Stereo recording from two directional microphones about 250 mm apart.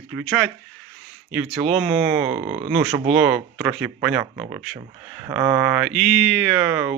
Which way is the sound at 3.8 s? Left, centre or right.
Centre.